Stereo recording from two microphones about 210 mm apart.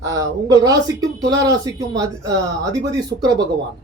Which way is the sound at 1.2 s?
20° right (ahead or behind).